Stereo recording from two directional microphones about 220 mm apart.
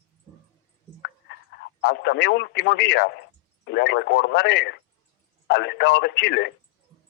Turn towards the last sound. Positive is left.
turn(degrees=50)  # may be behind; listen again after turning